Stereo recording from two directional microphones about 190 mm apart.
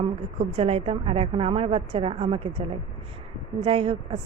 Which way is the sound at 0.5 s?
30° right (ahead or behind).